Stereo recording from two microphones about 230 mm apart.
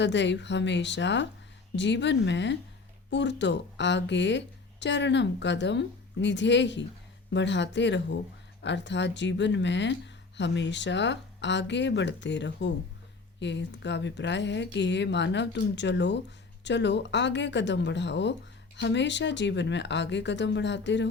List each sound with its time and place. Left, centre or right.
0.0 s speech: left